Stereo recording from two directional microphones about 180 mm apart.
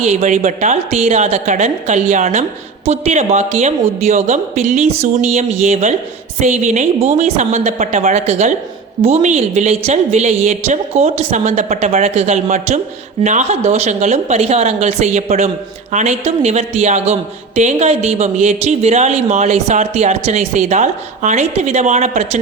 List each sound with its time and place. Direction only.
0.0 s speech: 40° right (ahead or behind)